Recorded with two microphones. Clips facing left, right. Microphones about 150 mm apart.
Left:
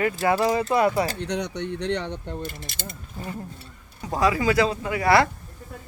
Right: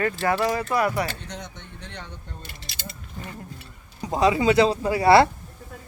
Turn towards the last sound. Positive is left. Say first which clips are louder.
# right 4 dB
turn(degrees=-30)  # may be behind; listen again after turning